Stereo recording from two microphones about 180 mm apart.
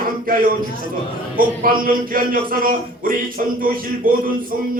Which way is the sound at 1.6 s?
50° right (ahead or behind).